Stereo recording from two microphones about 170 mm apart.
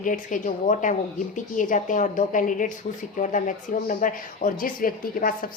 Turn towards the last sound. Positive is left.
turn(degrees=55)  # may be behind; listen again after turning